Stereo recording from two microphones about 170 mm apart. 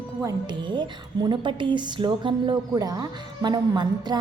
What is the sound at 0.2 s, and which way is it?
A woman's voice, 20° right (ahead or behind).